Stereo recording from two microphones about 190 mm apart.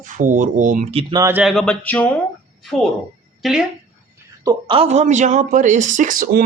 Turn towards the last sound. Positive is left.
turn(degrees=-50)  # may be behind; listen again after turning